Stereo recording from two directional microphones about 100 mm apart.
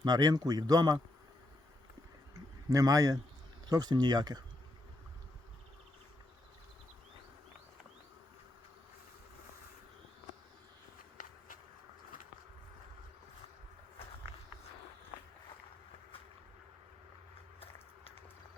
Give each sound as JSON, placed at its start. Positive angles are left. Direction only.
{"t": 0.0, "sound": "speech", "side_deg": -40}
{"t": 2.6, "sound": "speech", "side_deg": -35}